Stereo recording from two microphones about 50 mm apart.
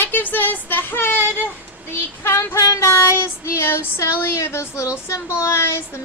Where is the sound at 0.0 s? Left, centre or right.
Left.